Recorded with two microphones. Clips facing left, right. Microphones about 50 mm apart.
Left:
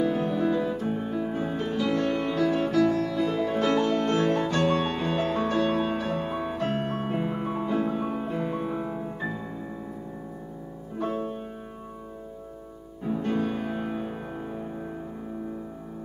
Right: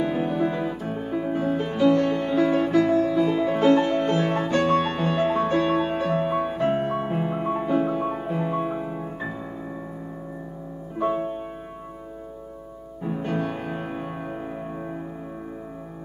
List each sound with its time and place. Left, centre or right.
0.0 s music: centre
0.3 s music: right
0.7 s music: centre
1.1 s music: centre
2.0 s music: right
11.0 s music: right
13.0 s music: centre